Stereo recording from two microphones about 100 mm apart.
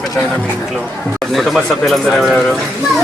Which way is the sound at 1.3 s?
Centre (ahead or behind).